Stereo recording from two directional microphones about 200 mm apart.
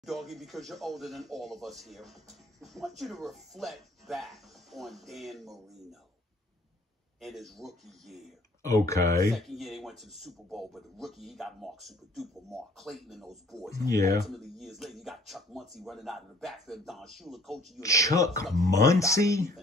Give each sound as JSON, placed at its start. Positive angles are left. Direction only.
{"t": 0.0, "sound": "a man's voice", "side_deg": 0}
{"t": 7.2, "sound": "a man's voice", "side_deg": 0}
{"t": 8.6, "sound": "speech", "side_deg": 15}
{"t": 9.3, "sound": "a man's voice", "side_deg": 0}
{"t": 13.8, "sound": "speech", "side_deg": 15}
{"t": 14.2, "sound": "a man's voice", "side_deg": 0}
{"t": 17.7, "sound": "speech", "side_deg": 15}